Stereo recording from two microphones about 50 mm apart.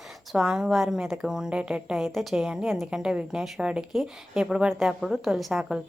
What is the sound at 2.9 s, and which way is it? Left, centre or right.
Speech, centre.